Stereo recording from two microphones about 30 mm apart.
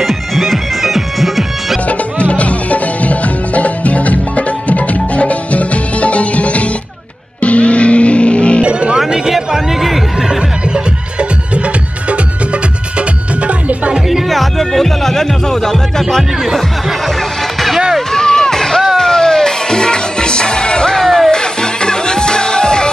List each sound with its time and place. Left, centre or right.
0.0 s music: centre
1.9 s music: left
8.6 s music: right
9.3 s chatter: centre
10.7 s music: right
13.5 s music: right
14.3 s music: centre
18.1 s music: centre
21.0 s music: centre